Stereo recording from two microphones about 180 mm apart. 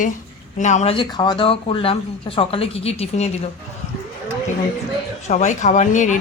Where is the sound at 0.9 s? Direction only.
25° left (ahead or behind).